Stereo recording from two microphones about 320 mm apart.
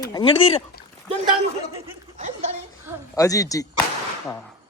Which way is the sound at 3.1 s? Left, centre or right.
Centre.